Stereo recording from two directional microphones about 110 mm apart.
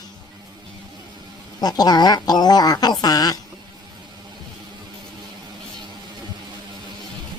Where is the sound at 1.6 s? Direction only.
35° left (ahead or behind).